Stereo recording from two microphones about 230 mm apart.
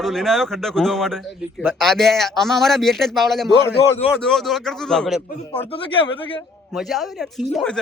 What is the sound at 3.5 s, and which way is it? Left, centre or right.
Speech, left.